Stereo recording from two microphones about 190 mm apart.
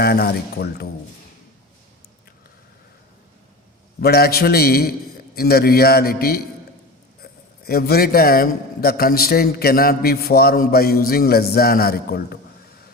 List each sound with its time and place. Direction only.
0.0 s speech: 55° left (ahead or behind)
4.0 s a man's voice: 55° left (ahead or behind)
7.6 s a man's voice: 55° left (ahead or behind)